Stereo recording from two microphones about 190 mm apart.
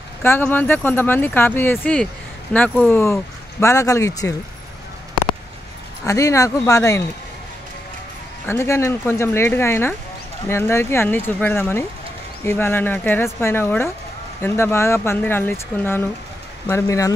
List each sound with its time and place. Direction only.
0.2 s speech: 10° left (ahead or behind)
6.0 s speech: 15° left (ahead or behind)
8.5 s speech: 15° left (ahead or behind)